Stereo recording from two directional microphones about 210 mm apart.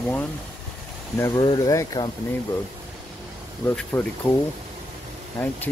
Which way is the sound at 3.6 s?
10° left (ahead or behind).